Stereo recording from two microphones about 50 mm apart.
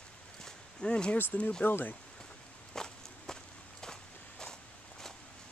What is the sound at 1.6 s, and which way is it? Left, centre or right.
Speech, left.